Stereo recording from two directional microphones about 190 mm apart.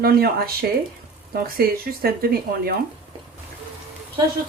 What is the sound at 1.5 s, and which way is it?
Speech, 50° right (ahead or behind).